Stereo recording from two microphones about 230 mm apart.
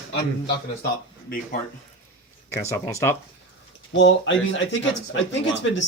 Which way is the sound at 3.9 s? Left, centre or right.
Left.